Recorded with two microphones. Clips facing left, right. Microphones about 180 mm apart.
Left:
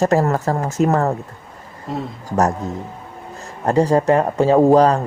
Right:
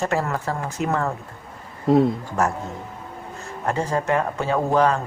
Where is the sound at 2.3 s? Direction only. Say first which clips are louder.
Left 5 dB; 40° left (ahead or behind).